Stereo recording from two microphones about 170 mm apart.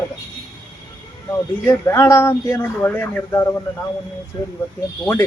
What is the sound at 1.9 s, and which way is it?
A man's voice, 15° left (ahead or behind).